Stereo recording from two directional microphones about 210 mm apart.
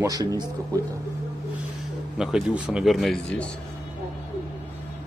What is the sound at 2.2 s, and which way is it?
A man's voice, 5° right (ahead or behind).